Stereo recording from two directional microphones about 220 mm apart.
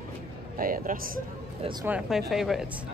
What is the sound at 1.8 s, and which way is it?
Speech, 5° right (ahead or behind).